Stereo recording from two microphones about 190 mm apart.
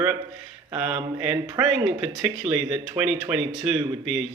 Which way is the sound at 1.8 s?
30° right (ahead or behind).